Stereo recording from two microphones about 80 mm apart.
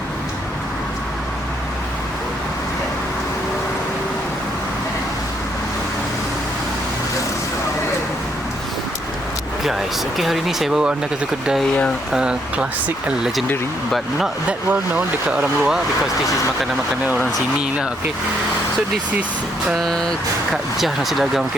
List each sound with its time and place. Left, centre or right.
9.6 s speech: centre
12.1 s speech: centre
14.7 s speech: centre
17.6 s speech: centre
19.8 s speech: centre
20.5 s speech: centre